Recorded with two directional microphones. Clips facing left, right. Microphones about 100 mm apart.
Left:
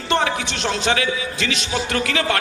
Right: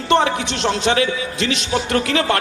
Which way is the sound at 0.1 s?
25° right (ahead or behind).